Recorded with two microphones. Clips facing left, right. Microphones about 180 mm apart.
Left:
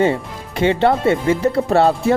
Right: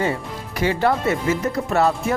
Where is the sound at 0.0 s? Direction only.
25° left (ahead or behind).